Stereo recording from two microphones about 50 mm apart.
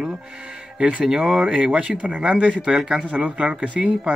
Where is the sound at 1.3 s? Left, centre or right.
Right.